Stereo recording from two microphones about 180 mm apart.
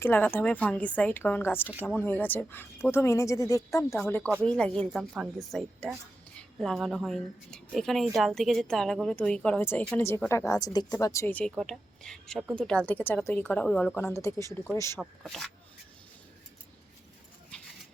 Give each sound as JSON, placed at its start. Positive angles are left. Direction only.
{"t": 0.0, "sound": "a woman's voice", "side_deg": 10}
{"t": 15.2, "sound": "a woman's voice", "side_deg": 0}